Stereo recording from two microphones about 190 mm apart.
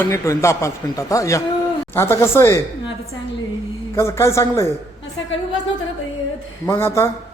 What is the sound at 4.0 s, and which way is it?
Speech, 15° left (ahead or behind).